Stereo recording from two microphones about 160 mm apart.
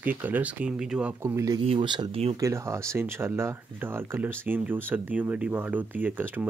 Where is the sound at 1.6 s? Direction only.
35° right (ahead or behind).